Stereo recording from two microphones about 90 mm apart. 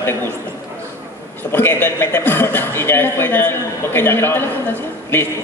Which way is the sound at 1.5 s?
25° left (ahead or behind).